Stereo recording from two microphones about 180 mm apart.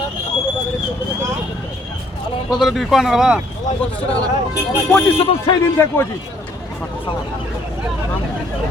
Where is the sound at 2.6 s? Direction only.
Centre (ahead or behind).